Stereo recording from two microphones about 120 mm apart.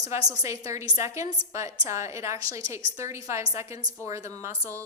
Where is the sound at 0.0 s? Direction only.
30° right (ahead or behind).